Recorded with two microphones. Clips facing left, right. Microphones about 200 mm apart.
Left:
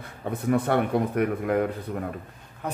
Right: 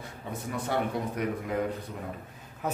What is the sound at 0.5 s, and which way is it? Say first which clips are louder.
Speech: left 8 dB; 60° left (ahead or behind).